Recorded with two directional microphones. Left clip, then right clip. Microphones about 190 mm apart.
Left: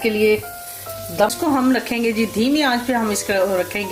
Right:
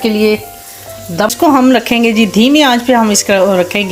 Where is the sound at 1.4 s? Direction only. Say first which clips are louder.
Right 10 dB; 45° right (ahead or behind).